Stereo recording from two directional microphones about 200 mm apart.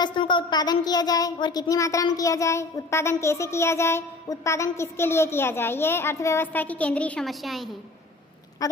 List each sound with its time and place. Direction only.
0.0 s speech: 25° left (ahead or behind); by 7.7 s centre (ahead or behind)
8.6 s speech: 15° left (ahead or behind)